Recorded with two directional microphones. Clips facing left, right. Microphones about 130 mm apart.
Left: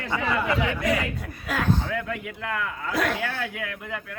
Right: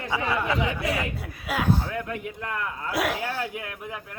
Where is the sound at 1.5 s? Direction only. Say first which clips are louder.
Even; 10° right (ahead or behind).